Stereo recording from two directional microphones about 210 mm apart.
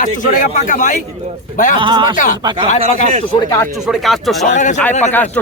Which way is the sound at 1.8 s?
20° right (ahead or behind).